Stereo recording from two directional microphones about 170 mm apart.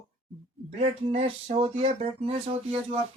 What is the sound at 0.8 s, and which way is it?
Speech, 35° right (ahead or behind).